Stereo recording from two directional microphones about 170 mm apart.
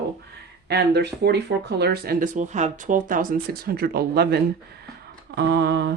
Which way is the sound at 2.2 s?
50° right (ahead or behind).